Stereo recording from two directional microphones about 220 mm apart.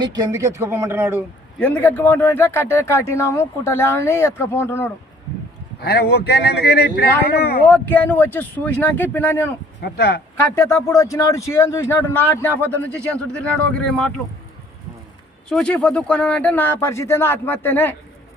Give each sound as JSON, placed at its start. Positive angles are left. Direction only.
{"t": 0.0, "sound": "speech", "side_deg": -20}
{"t": 1.5, "sound": "speech", "side_deg": 5}
{"t": 5.8, "sound": "speech", "side_deg": 45}
{"t": 7.7, "sound": "speech", "side_deg": 5}
{"t": 9.8, "sound": "speech", "side_deg": 45}
{"t": 10.5, "sound": "speech", "side_deg": 10}
{"t": 15.4, "sound": "speech", "side_deg": 5}